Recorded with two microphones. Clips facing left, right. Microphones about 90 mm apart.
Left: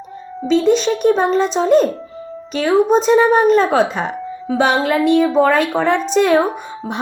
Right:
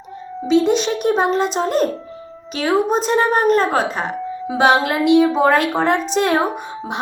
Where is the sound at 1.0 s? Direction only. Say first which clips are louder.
Left 3 dB; 55° right (ahead or behind).